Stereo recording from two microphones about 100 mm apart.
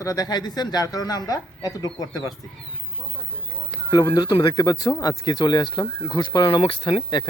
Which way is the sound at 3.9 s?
35° left (ahead or behind).